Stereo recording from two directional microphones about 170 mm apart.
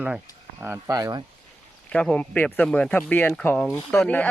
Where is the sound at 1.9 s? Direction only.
5° left (ahead or behind).